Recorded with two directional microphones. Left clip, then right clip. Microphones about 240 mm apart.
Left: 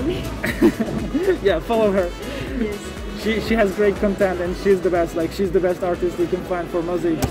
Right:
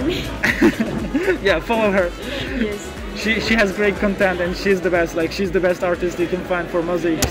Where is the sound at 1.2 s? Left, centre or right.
Centre.